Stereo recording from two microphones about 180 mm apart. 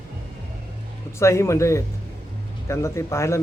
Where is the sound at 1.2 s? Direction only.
15° left (ahead or behind).